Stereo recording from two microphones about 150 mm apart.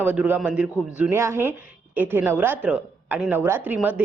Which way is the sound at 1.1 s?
20° right (ahead or behind).